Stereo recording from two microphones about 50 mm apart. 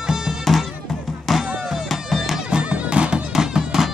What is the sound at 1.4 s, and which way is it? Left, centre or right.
Music, right.